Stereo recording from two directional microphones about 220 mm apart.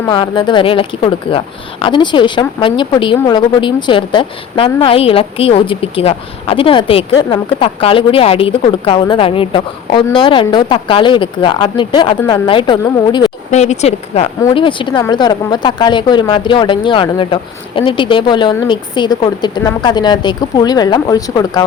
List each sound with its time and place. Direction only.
0.1 s speech: 20° left (ahead or behind)
13.5 s speech: 30° left (ahead or behind)